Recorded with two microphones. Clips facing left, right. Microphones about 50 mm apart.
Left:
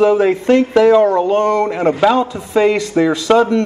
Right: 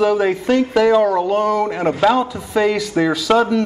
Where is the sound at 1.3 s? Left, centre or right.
Left.